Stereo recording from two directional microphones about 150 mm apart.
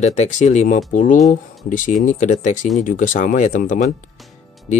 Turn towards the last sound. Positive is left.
turn(degrees=60)  # may be behind; listen again after turning